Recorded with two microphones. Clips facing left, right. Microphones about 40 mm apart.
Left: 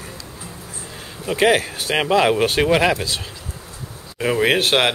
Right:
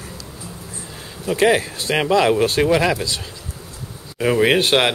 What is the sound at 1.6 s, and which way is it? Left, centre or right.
Speech, centre.